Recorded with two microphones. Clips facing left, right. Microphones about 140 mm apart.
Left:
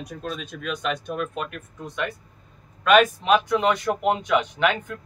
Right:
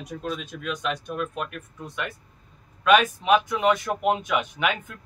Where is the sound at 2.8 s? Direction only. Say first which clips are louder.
Left 2 dB; 5° right (ahead or behind).